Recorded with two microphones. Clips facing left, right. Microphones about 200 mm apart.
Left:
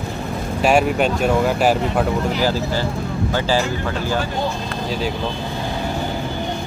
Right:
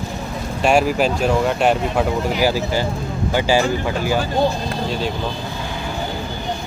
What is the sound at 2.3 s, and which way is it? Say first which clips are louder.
Speech: right 1 dB; 10° right (ahead or behind).